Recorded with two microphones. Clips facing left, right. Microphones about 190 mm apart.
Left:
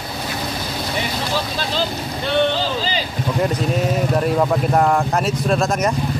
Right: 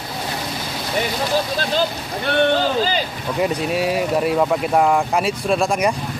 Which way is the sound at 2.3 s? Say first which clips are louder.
Right 2 dB; 50° right (ahead or behind).